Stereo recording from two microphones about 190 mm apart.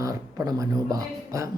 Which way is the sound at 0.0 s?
20° right (ahead or behind).